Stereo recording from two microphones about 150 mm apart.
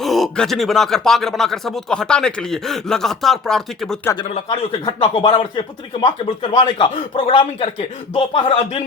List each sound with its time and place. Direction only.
0.0 s speech: centre (ahead or behind)
4.4 s speech: 35° left (ahead or behind)